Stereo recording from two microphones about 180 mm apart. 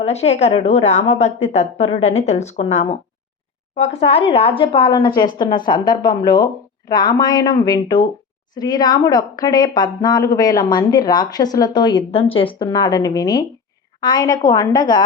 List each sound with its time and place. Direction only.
0.0 s a woman's voice: 35° left (ahead or behind)